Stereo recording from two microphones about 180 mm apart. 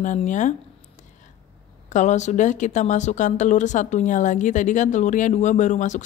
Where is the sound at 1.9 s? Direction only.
40° left (ahead or behind).